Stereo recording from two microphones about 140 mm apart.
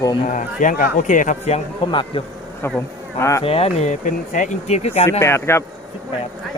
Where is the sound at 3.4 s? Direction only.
45° left (ahead or behind).